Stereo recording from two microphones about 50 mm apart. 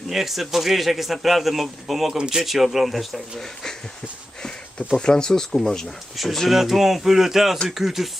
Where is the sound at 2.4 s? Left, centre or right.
Centre.